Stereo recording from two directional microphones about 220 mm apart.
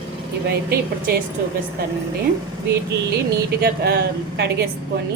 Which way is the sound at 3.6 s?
45° right (ahead or behind).